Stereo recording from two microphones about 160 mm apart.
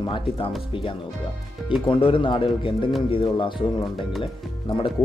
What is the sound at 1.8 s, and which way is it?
Speech, 35° left (ahead or behind).